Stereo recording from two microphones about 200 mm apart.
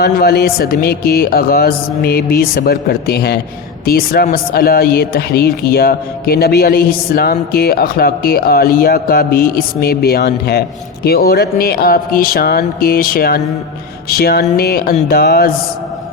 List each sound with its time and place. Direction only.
0.0 s speech: 50° left (ahead or behind)